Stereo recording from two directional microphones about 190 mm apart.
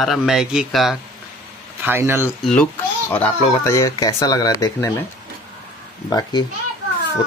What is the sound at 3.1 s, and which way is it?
Speech, 10° left (ahead or behind).